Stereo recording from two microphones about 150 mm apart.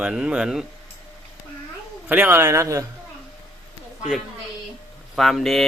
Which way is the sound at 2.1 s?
15° right (ahead or behind).